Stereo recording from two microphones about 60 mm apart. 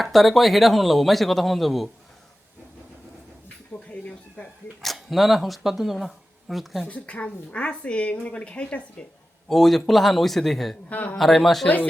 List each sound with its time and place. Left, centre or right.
0.0 s speech: centre
3.8 s a sound: left
4.8 s speech: centre
6.8 s a woman's voice: left
9.5 s speech: centre
10.8 s a woman's voice: left
11.2 s speech: centre